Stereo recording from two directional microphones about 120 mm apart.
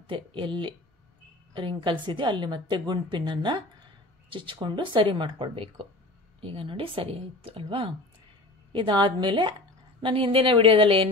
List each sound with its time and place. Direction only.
0.0 s a woman's voice: 45° right (ahead or behind)